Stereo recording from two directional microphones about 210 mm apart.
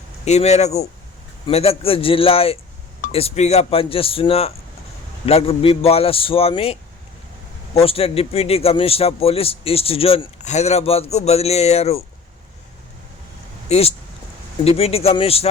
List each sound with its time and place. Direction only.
0.3 s a man's voice: 30° left (ahead or behind)
13.7 s a man's voice: 30° left (ahead or behind)